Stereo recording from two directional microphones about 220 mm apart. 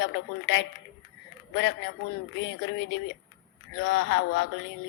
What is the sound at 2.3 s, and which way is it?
A woman's voice, 55° left (ahead or behind).